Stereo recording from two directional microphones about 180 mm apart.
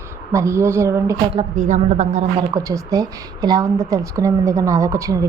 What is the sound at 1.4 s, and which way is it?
Speech, 40° right (ahead or behind).